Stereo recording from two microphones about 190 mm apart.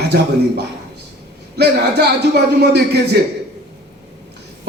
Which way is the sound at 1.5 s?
60° right (ahead or behind).